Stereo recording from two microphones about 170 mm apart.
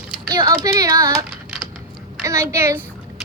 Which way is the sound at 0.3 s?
20° right (ahead or behind).